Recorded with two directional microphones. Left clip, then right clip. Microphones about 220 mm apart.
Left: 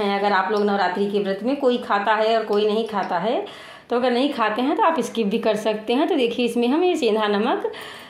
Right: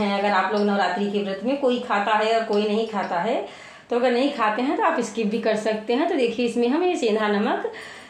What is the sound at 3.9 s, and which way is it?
A woman's voice, 40° left (ahead or behind).